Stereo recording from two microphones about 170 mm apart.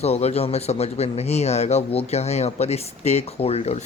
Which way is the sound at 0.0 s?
40° left (ahead or behind).